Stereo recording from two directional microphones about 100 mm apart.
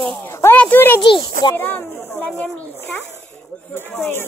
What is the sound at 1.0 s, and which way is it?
Speech, 55° left (ahead or behind).